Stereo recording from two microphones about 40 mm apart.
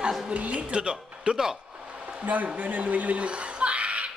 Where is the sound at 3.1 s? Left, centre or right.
Right.